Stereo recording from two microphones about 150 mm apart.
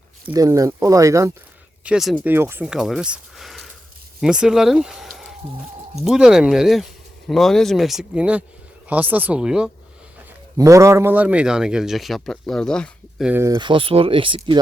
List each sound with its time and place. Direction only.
0.3 s speech: 20° right (ahead or behind)
1.8 s speech: 5° right (ahead or behind)
2.2 s speech: 15° right (ahead or behind)
10.6 s speech: 20° right (ahead or behind); by 13.2 s 5° left (ahead or behind)
13.2 s speech: 15° right (ahead or behind)
13.6 s speech: 35° right (ahead or behind)